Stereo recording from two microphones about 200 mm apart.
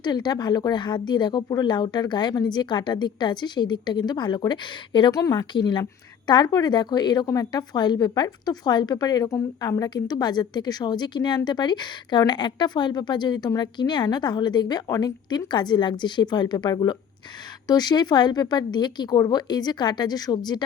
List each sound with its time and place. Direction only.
0.0 s a woman's voice: 20° left (ahead or behind)